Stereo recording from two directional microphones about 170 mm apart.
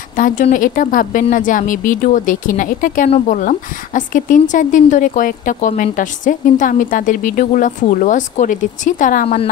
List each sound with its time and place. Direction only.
0.1 s speech: 50° left (ahead or behind)